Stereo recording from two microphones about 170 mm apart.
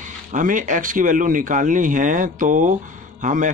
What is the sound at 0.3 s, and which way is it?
Speech, 50° right (ahead or behind).